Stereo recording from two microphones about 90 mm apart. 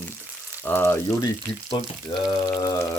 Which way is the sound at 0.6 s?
25° left (ahead or behind).